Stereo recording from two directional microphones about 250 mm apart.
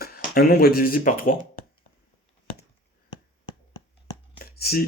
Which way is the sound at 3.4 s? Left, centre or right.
Centre.